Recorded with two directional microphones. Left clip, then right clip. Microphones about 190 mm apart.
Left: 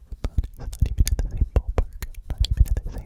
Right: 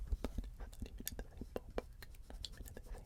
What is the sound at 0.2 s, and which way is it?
Whispering, 25° left (ahead or behind).